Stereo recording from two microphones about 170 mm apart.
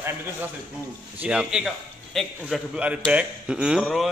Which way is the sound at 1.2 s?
5° right (ahead or behind).